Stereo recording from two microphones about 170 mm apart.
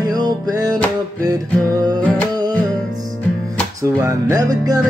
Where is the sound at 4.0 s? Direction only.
15° right (ahead or behind).